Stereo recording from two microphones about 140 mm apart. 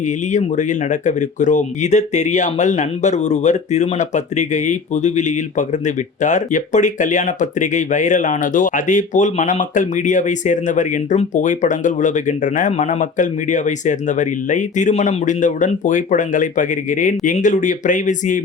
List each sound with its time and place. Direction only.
0.3 s speech: 60° left (ahead or behind)